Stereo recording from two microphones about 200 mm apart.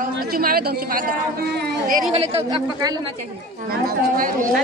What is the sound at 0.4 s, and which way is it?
Speech, 50° right (ahead or behind).